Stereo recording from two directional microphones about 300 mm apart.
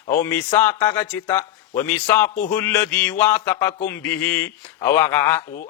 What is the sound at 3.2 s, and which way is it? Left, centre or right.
A man's voice, centre.